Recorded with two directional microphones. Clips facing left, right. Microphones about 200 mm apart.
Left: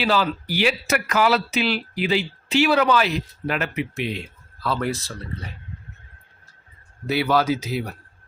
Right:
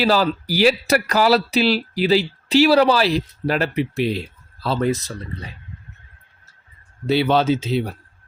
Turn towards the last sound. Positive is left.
turn(degrees=-25)  # may be behind; listen again after turning